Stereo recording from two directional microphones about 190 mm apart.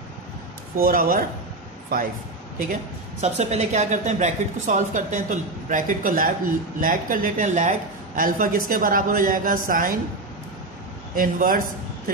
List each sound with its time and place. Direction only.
0.7 s a woman's voice: 50° right (ahead or behind)
2.7 s a woman's voice: 35° right (ahead or behind)
11.1 s a woman's voice: 45° right (ahead or behind)